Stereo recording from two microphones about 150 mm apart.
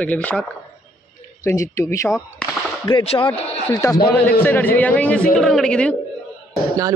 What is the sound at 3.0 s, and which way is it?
Speech, 40° left (ahead or behind).